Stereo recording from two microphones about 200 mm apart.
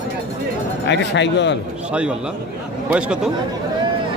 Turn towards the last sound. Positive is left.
turn(degrees=-5)  # may be behind; listen again after turning